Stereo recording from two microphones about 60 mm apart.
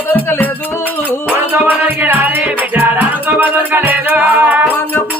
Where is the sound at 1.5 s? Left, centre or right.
Right.